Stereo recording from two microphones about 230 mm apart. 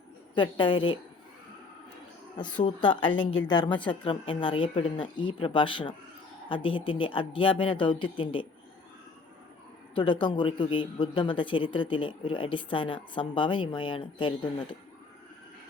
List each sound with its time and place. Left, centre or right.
0.3 s a man's voice: left
2.6 s a man's voice: left
9.9 s a man's voice: left